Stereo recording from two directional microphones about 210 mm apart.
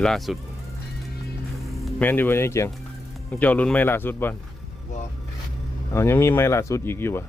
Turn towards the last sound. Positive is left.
turn(degrees=10)  # may be behind; listen again after turning